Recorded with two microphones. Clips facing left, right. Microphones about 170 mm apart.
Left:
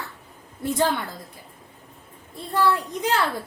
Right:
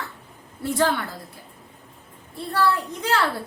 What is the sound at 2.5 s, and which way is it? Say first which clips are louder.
Speech: left 1 dB; 15° left (ahead or behind).